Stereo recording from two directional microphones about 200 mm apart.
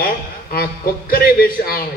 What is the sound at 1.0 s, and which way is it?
Speech, 45° left (ahead or behind).